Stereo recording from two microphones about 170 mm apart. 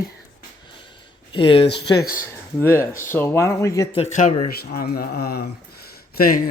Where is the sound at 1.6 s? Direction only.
85° left.